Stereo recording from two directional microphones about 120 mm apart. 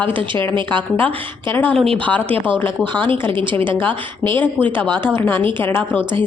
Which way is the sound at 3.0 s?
45° right (ahead or behind).